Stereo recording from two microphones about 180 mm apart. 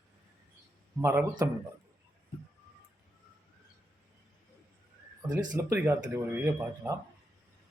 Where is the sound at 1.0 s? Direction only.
15° right (ahead or behind).